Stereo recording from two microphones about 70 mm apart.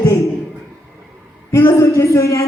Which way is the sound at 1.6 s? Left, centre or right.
Left.